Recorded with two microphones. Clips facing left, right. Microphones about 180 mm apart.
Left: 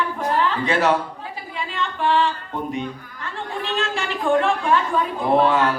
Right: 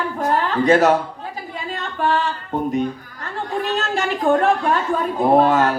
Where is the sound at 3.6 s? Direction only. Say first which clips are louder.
Right 3 dB; 40° right (ahead or behind).